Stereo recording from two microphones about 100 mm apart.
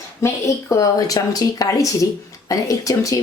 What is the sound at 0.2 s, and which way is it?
Speech, 30° left (ahead or behind).